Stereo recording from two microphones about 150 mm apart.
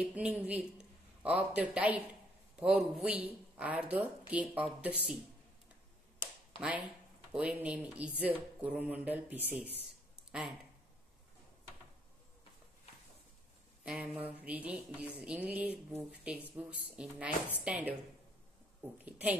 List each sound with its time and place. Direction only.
0.0 s speech: 10° right (ahead or behind)
6.5 s speech: 35° left (ahead or behind)
7.3 s speech: 10° right (ahead or behind)
13.8 s speech: 10° right (ahead or behind)
19.0 s speech: 10° right (ahead or behind)